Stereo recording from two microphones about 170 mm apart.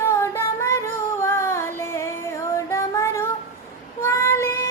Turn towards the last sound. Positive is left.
turn(degrees=15)  # may be behind; listen again after turning